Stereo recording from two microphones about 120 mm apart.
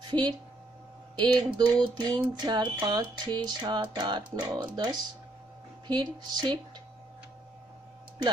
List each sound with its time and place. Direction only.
0.0 s speech: 40° right (ahead or behind)